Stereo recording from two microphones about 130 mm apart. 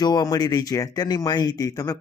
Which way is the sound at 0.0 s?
30° left (ahead or behind).